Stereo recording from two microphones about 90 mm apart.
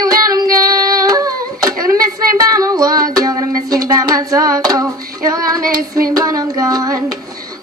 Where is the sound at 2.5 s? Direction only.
40° right (ahead or behind).